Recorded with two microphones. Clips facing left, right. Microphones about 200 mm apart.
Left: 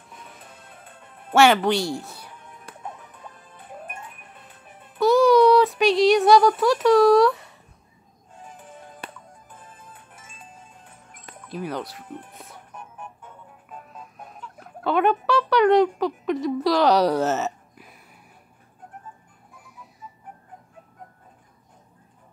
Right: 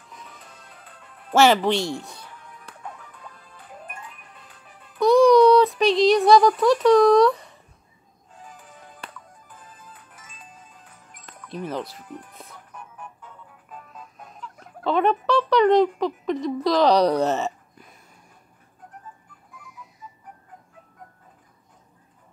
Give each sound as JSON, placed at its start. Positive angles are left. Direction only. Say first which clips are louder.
{"t": 0.1, "sound": "music", "louder": "even", "side_deg": 0}
{"t": 0.8, "sound": "music", "louder": "left 2 dB", "side_deg": 25}
{"t": 1.3, "sound": "a woman's voice", "louder": "even", "side_deg": 0}
{"t": 2.3, "sound": "music", "louder": "left 1 dB", "side_deg": 20}
{"t": 4.9, "sound": "a sound", "louder": "right 2 dB", "side_deg": 5}
{"t": 8.4, "sound": "music", "louder": "left 3 dB", "side_deg": 25}
{"t": 11.4, "sound": "a woman's voice", "louder": "even", "side_deg": 0}
{"t": 12.1, "sound": "speech", "louder": "left 1 dB", "side_deg": 25}
{"t": 12.7, "sound": "music", "louder": "left 1 dB", "side_deg": 25}
{"t": 14.6, "sound": "speech", "louder": "even", "side_deg": 5}